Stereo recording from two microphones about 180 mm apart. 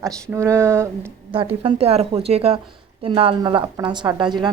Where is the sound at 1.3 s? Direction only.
30° right (ahead or behind).